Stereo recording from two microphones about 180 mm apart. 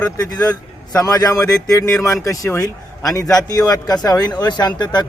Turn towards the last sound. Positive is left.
turn(degrees=25)  # may be behind; listen again after turning